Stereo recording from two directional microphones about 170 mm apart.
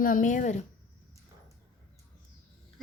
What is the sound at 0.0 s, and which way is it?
Speech, 50° left (ahead or behind).